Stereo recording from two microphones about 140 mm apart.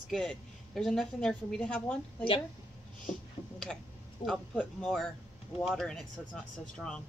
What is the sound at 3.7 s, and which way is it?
A woman's voice, 5° left (ahead or behind).